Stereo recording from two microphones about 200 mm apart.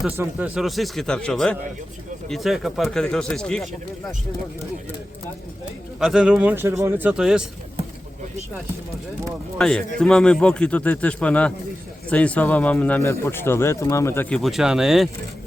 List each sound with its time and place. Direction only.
0.0 s a man's voice: 5° right (ahead or behind)
6.0 s a man's voice: 5° right (ahead or behind)
9.6 s a man's voice: 5° left (ahead or behind)